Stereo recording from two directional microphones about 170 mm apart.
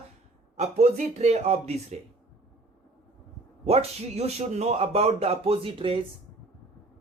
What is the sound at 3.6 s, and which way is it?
Speech, 40° right (ahead or behind).